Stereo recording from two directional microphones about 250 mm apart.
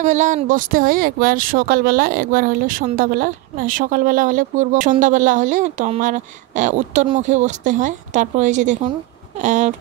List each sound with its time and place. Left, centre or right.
0.0 s speech: right